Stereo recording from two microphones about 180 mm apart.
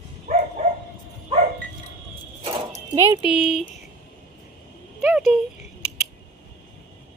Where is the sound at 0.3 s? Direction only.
45° right (ahead or behind).